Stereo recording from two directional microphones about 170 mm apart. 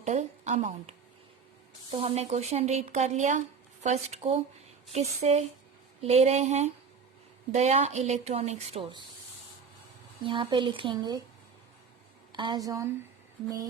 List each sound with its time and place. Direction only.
0.0 s a woman's voice: 45° right (ahead or behind)
10.2 s speech: 30° right (ahead or behind)
12.3 s speech: 25° right (ahead or behind)